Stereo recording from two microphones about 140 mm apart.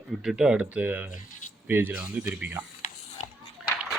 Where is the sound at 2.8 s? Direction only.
60° left (ahead or behind).